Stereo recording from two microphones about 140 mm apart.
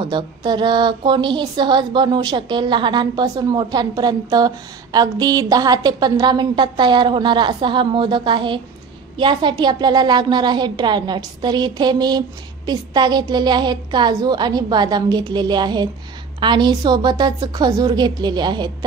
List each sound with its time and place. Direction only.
0.0 s speech: 30° right (ahead or behind)